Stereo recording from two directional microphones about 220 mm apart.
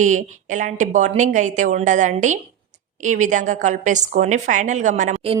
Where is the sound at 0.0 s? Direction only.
35° right (ahead or behind).